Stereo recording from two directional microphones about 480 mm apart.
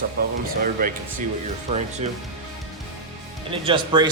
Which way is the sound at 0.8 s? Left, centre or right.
Centre.